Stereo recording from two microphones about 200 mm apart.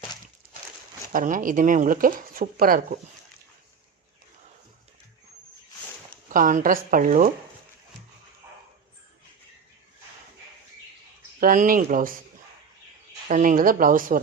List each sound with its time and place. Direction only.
1.1 s speech: 40° right (ahead or behind)
6.2 s speech: 40° right (ahead or behind)
11.3 s speech: 45° right (ahead or behind)
13.2 s speech: 40° right (ahead or behind)